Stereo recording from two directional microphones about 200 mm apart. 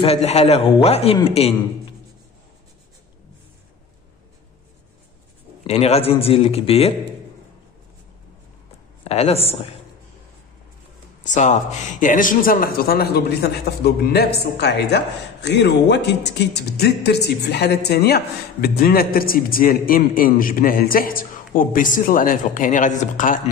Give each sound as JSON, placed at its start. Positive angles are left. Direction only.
{"t": 0.0, "sound": "a man's voice", "side_deg": 30}
{"t": 5.6, "sound": "speech", "side_deg": 30}
{"t": 9.0, "sound": "a man's voice", "side_deg": 30}
{"t": 11.2, "sound": "a man's voice", "side_deg": 35}